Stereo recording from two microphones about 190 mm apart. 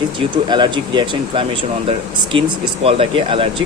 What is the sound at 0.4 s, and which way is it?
Speech, 25° right (ahead or behind).